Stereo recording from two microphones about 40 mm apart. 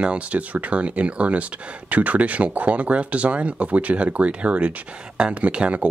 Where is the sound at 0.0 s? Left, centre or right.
Right.